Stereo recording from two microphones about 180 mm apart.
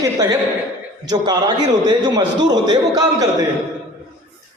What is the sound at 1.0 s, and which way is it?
A man's voice, 20° right (ahead or behind).